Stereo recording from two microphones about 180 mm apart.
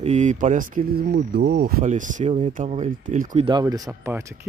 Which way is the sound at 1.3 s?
65° right (ahead or behind).